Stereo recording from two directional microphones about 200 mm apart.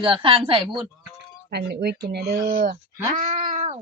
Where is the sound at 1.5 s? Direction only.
55° right (ahead or behind).